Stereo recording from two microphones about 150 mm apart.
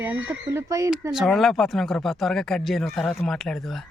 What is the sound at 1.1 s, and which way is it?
Speech, centre (ahead or behind).